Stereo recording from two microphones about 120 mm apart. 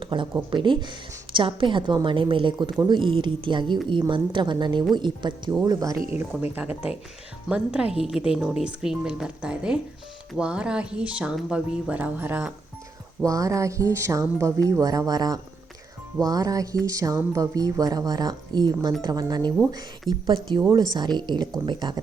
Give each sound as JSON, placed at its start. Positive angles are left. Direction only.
{"t": 0.0, "sound": "a woman's voice", "side_deg": -45}
{"t": 6.1, "sound": "a woman's voice", "side_deg": -15}
{"t": 13.2, "sound": "a woman's voice", "side_deg": -30}